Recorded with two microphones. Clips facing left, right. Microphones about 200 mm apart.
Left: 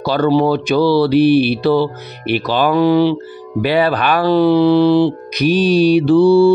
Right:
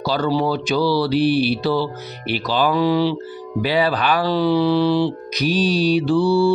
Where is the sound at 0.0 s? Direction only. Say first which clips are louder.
Left 6 dB; 60° left (ahead or behind).